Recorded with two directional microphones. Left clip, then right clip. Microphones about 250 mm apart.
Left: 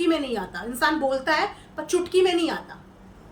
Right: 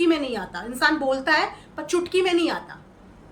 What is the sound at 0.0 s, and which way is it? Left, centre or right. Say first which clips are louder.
A woman's voice: right 2 dB; centre.